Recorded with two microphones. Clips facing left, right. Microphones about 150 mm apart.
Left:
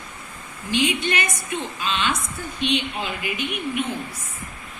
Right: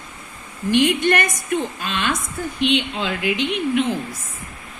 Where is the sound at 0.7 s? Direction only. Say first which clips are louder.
Right 6 dB; 50° right (ahead or behind).